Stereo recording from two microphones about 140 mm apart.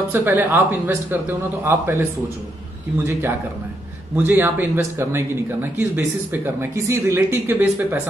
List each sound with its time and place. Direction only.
0.1 s speech: 15° right (ahead or behind)